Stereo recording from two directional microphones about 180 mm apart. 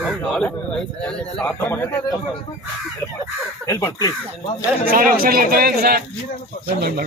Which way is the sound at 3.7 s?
20° left (ahead or behind).